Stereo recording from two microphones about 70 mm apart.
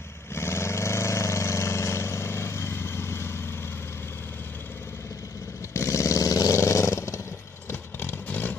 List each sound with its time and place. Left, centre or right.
0.3 s vehicle: left
5.7 s vehicle: left
6.6 s vehicle: left
8.0 s vehicle: left